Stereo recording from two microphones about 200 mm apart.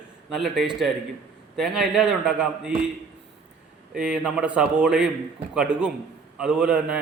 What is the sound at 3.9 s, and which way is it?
A man's voice, 5° right (ahead or behind).